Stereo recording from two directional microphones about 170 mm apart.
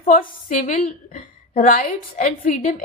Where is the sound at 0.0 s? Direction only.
55° left (ahead or behind).